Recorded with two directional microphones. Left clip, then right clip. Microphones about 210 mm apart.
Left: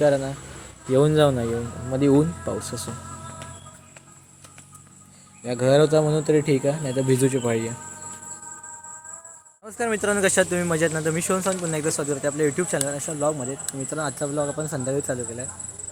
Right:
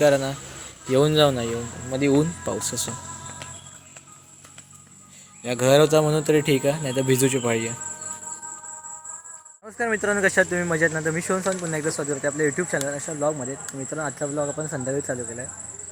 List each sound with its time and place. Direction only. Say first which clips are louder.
0.0 s speech: right 1 dB; 5° right (ahead or behind); by 2.2 s 15° left (ahead or behind)
2.5 s speech: right 2 dB; centre (ahead or behind)
5.4 s speech: right 1 dB; 5° right (ahead or behind)
9.6 s speech: even; 5° left (ahead or behind)